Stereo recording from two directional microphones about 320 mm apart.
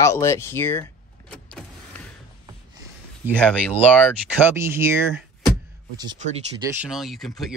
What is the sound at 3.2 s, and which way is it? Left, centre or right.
Speech, centre.